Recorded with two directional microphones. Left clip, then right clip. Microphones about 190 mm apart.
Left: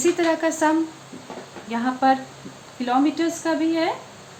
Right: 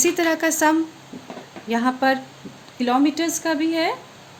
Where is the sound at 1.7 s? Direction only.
60° right (ahead or behind).